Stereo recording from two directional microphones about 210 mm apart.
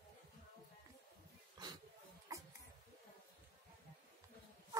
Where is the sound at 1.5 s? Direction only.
20° right (ahead or behind).